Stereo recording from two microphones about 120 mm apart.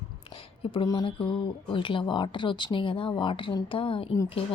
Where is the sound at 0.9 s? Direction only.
40° left (ahead or behind).